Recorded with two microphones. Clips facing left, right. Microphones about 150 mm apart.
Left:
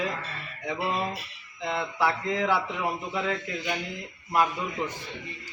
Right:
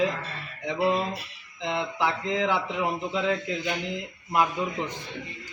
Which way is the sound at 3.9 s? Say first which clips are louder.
Even; 15° right (ahead or behind).